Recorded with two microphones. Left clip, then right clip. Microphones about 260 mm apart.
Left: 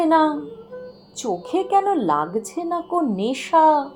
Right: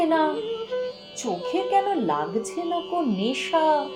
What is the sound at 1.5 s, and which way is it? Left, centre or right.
A woman's voice, left.